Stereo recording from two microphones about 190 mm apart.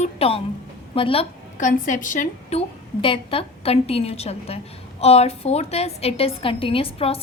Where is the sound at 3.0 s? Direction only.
30° left (ahead or behind).